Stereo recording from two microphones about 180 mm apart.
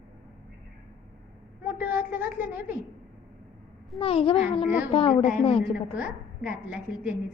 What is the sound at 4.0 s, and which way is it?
A child's voice, 30° left (ahead or behind).